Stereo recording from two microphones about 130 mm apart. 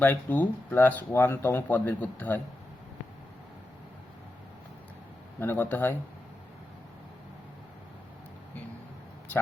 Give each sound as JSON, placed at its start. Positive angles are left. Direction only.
{"t": 0.0, "sound": "speech", "side_deg": 15}
{"t": 5.4, "sound": "speech", "side_deg": 15}